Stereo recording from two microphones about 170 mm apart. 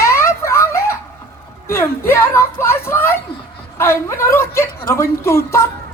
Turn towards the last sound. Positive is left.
turn(degrees=15)  # may be behind; listen again after turning